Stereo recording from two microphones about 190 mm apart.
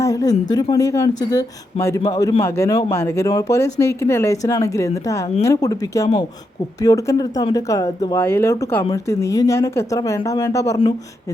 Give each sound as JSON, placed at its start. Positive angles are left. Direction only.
{"t": 0.0, "sound": "a man's voice", "side_deg": 20}